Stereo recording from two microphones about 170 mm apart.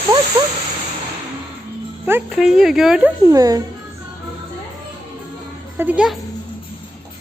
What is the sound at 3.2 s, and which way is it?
Speech, 20° right (ahead or behind).